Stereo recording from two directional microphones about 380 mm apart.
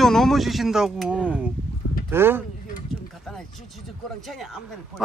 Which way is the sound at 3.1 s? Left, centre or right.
Centre.